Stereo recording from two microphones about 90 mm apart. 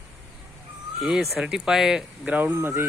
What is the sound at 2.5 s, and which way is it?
Speech, 25° right (ahead or behind).